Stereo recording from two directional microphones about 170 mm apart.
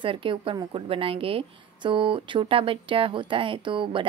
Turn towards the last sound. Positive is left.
turn(degrees=-30)  # may be behind; listen again after turning